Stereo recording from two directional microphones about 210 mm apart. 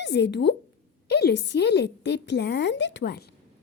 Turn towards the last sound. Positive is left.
turn(degrees=50)  # may be behind; listen again after turning